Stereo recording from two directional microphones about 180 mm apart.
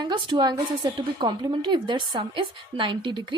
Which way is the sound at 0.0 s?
25° right (ahead or behind).